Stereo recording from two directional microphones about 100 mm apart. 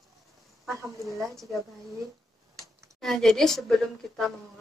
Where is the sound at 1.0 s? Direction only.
30° right (ahead or behind).